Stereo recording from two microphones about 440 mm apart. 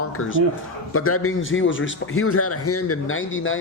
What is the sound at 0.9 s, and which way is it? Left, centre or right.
A man's voice, left.